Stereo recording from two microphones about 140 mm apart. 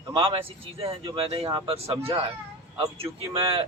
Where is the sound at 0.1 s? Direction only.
40° right (ahead or behind).